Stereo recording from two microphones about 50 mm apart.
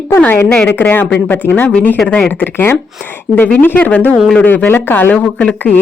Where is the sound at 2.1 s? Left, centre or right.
Left.